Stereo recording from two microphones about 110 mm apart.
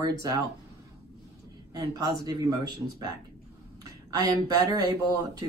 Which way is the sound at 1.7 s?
35° right (ahead or behind).